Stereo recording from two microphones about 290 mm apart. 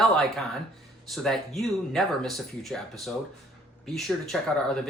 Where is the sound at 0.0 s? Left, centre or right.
Centre.